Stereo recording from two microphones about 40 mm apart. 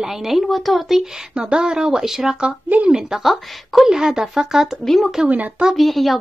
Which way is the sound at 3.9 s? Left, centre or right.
Centre.